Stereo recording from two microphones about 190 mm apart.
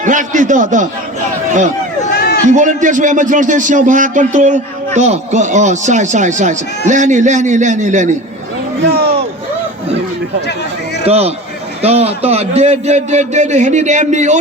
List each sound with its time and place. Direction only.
0.0 s speech: 40° right (ahead or behind)
2.1 s a sound: 55° left (ahead or behind)
2.6 s speech: 40° right (ahead or behind)
11.0 s speech: 30° right (ahead or behind)